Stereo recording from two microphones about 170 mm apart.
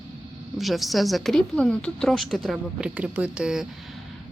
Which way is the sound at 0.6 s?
Centre (ahead or behind).